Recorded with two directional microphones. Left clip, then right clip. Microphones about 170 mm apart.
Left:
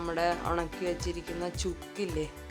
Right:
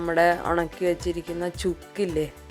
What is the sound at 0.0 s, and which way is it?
Speech, 30° right (ahead or behind).